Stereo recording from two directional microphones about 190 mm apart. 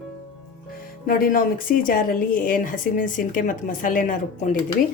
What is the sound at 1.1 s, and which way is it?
A woman's voice, 50° left (ahead or behind).